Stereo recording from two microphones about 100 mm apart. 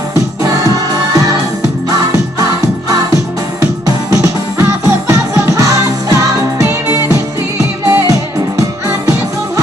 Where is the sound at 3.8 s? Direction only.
35° right (ahead or behind).